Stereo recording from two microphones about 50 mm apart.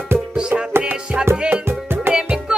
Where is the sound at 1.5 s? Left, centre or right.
Right.